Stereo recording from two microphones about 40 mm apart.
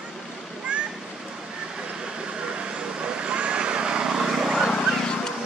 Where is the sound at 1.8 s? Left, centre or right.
Centre.